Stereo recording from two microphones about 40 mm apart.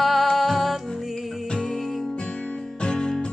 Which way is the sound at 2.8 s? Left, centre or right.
Left.